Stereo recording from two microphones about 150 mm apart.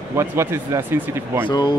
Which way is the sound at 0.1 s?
15° right (ahead or behind).